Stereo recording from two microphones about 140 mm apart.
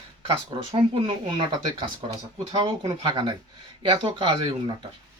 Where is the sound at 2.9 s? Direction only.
30° right (ahead or behind).